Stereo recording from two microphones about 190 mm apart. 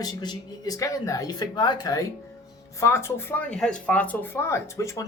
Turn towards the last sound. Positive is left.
turn(degrees=15)  # may be behind; listen again after turning